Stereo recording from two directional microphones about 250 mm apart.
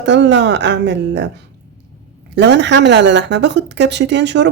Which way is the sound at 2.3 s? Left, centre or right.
Right.